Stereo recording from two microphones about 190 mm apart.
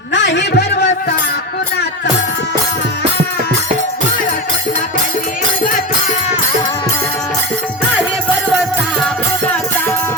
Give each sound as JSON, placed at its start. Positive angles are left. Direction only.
{"t": 0.1, "sound": "a man's voice", "side_deg": 70}